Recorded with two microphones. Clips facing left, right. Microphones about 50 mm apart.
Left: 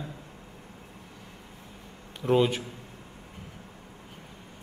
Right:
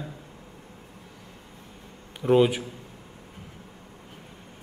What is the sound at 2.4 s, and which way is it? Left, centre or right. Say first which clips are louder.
Speech: right 4 dB; centre.